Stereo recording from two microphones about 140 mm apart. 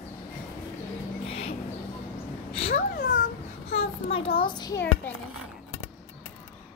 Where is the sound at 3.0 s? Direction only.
75° left (ahead or behind).